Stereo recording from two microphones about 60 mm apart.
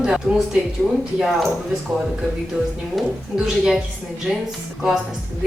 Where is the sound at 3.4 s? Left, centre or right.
Centre.